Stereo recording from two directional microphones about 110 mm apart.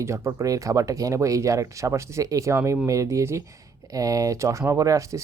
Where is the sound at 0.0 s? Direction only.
25° right (ahead or behind).